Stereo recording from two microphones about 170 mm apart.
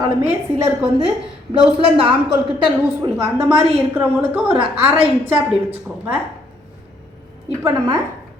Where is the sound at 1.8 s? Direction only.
35° right (ahead or behind).